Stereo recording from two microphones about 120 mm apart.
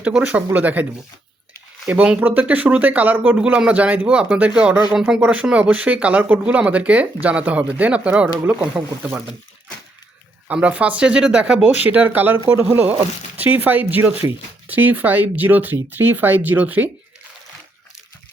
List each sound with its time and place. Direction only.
0.0 s speech: 10° right (ahead or behind)
1.9 s speech: 15° right (ahead or behind)
10.5 s speech: 10° right (ahead or behind)